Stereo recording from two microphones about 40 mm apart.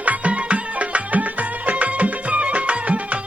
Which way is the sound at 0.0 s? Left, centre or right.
Right.